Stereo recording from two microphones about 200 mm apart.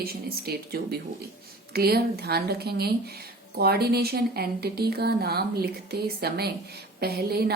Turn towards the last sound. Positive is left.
turn(degrees=-50)  # may be behind; listen again after turning